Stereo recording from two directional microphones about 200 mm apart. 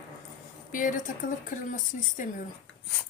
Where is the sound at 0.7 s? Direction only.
40° left (ahead or behind).